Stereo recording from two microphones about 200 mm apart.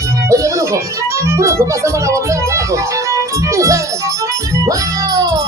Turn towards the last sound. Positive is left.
turn(degrees=-15)  # may be behind; listen again after turning